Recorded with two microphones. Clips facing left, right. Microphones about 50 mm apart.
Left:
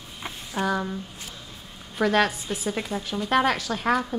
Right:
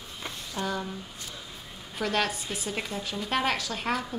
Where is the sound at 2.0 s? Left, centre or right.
Centre.